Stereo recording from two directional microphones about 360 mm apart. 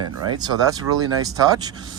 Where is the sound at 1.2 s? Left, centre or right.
Centre.